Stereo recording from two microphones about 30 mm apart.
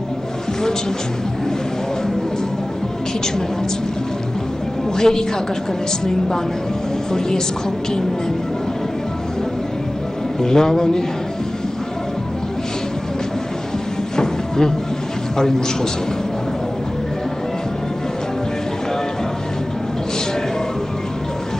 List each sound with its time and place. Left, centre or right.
4.9 s a man's voice: left
10.4 s a man's voice: centre
14.1 s a sound: left
15.3 s a man's voice: centre